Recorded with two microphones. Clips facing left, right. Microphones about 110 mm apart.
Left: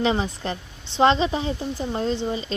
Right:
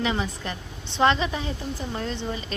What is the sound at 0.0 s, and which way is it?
A woman's voice, 30° left (ahead or behind).